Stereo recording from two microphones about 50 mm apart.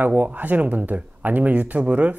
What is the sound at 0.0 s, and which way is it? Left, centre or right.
Speech, right.